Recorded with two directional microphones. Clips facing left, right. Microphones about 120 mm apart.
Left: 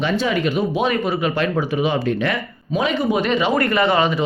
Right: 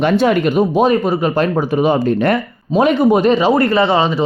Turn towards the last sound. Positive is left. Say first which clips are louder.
# right 4 dB
turn(degrees=-30)  # may be behind; listen again after turning